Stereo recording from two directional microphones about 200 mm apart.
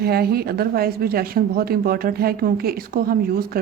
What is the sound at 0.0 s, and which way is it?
Speech, 50° right (ahead or behind).